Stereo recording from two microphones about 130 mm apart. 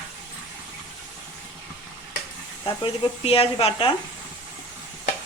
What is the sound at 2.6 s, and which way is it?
Speech, 45° left (ahead or behind).